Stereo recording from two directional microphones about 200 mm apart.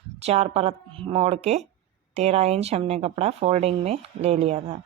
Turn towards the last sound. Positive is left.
turn(degrees=-35)  # may be behind; listen again after turning